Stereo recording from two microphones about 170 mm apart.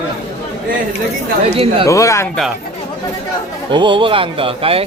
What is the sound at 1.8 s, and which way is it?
Speech, 20° left (ahead or behind).